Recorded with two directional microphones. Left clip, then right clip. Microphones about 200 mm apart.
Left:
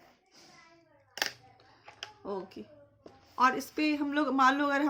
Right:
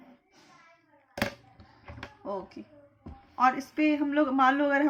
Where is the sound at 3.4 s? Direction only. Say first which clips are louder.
Right 2 dB; 30° left (ahead or behind).